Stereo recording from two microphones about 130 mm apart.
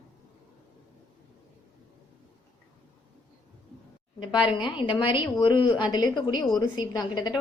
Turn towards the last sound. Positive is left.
turn(degrees=30)  # may be behind; listen again after turning